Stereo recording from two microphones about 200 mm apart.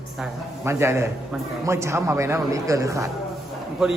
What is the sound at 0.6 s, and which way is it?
A man's voice, 15° right (ahead or behind).